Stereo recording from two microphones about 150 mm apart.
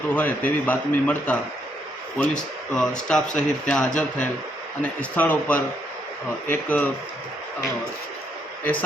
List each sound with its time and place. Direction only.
0.1 s a man's voice: 10° left (ahead or behind)